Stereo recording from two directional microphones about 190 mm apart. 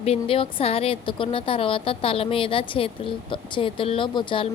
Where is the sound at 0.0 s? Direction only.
30° left (ahead or behind).